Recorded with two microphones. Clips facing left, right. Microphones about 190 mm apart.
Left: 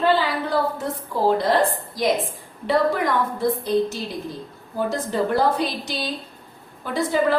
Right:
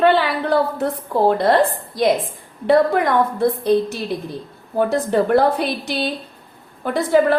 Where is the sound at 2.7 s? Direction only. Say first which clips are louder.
Right 5 dB; 55° right (ahead or behind).